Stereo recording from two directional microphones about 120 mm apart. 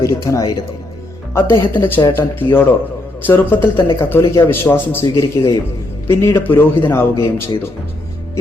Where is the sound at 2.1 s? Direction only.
15° left (ahead or behind).